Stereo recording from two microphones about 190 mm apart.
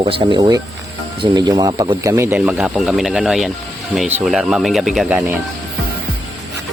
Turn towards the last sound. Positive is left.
turn(degrees=-5)  # may be behind; listen again after turning